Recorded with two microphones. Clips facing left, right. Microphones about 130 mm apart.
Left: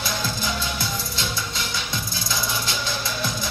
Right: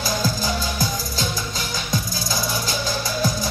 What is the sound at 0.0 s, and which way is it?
Music, 40° right (ahead or behind).